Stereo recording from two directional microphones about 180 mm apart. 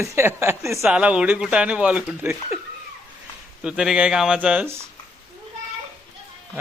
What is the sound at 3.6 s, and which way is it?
Speech, 5° right (ahead or behind).